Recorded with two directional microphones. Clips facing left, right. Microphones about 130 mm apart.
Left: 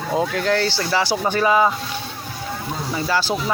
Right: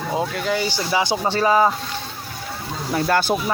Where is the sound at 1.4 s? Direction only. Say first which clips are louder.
Even; 35° right (ahead or behind).